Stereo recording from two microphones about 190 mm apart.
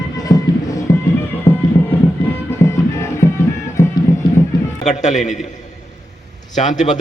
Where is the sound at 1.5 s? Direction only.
30° left (ahead or behind).